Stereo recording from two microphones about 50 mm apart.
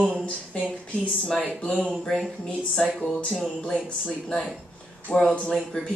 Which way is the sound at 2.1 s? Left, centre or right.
Centre.